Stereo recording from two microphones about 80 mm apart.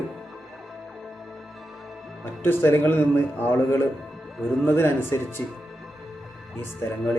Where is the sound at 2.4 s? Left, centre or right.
Left.